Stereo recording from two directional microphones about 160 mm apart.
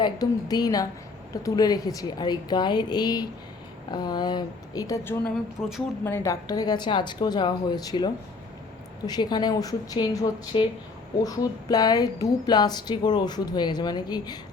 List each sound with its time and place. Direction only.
0.0 s a woman's voice: 25° left (ahead or behind)
5.2 s speech: centre (ahead or behind)
6.1 s a woman's voice: 15° left (ahead or behind)